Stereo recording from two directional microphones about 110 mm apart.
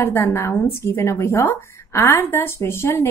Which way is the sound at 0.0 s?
25° left (ahead or behind).